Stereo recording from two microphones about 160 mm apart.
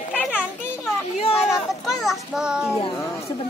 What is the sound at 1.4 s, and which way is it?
A child's voice, centre (ahead or behind).